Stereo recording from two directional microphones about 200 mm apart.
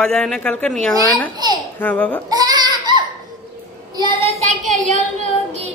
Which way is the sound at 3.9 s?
25° right (ahead or behind).